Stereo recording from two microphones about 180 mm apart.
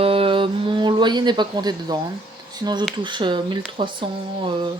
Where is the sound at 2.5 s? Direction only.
20° right (ahead or behind).